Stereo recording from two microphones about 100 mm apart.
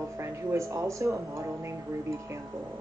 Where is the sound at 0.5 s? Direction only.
30° right (ahead or behind).